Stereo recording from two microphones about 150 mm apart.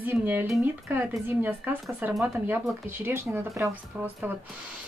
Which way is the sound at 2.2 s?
15° right (ahead or behind).